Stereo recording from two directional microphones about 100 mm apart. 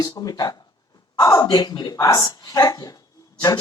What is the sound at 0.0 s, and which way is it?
Speech, 40° left (ahead or behind).